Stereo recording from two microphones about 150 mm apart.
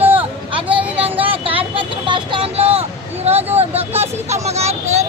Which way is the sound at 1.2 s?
40° right (ahead or behind).